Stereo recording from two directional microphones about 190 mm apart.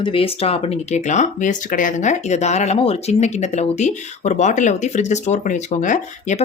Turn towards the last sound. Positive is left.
turn(degrees=40)  # may be behind; listen again after turning